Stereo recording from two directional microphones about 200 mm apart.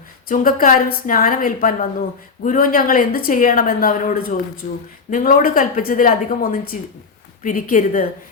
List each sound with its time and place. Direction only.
0.3 s a woman's voice: 45° left (ahead or behind)